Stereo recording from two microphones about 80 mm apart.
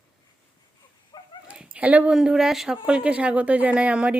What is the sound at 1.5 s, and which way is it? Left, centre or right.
Dog, centre.